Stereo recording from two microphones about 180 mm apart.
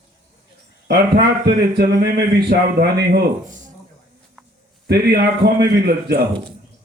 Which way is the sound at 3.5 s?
45° right (ahead or behind).